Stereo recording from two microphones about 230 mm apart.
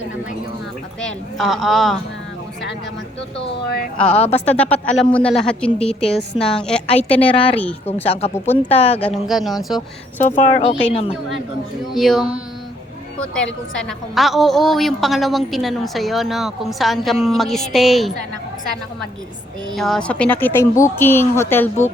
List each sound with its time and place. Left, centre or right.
1.0 s a woman's voice: centre
4.1 s speech: left
4.4 s a woman's voice: centre
6.8 s speech: left
9.0 s a woman's voice: centre
10.2 s speech: left
11.9 s a woman's voice: centre
13.8 s a woman's voice: centre
19.7 s speech: centre